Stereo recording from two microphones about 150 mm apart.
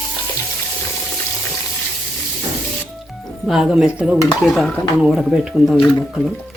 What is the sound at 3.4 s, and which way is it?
Speech, 5° right (ahead or behind).